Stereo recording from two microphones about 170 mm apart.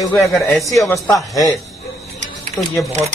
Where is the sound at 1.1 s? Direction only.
20° left (ahead or behind).